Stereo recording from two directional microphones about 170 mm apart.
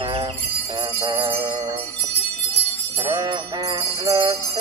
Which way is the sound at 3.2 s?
25° right (ahead or behind).